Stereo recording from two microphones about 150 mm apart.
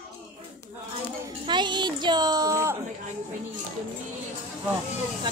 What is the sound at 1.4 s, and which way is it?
Music, 30° right (ahead or behind).